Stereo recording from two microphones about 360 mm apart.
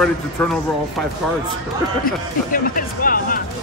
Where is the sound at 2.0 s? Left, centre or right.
Left.